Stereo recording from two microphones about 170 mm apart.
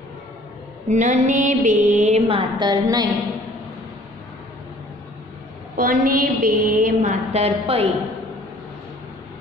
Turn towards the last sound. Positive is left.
turn(degrees=-35)  # may be behind; listen again after turning